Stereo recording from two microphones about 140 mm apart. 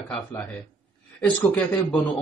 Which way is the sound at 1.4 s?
20° left (ahead or behind).